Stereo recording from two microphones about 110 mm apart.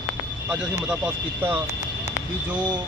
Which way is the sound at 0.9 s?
15° right (ahead or behind).